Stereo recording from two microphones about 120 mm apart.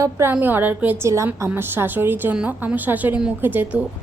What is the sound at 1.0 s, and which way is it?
A woman's voice, 25° right (ahead or behind).